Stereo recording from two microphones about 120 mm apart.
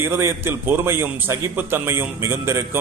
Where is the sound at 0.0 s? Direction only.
20° right (ahead or behind).